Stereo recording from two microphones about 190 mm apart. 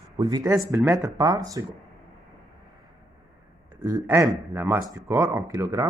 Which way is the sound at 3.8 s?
15° right (ahead or behind).